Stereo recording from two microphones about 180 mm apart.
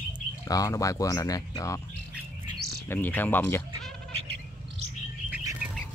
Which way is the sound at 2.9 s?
10° left (ahead or behind).